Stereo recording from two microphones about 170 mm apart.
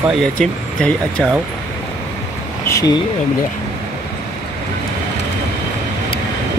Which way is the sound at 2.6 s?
20° left (ahead or behind).